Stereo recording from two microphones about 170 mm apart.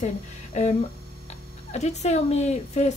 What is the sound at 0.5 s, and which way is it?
Speech, 45° left (ahead or behind).